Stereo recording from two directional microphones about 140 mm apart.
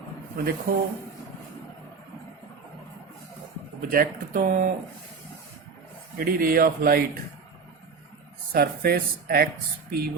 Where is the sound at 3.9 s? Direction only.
90° right.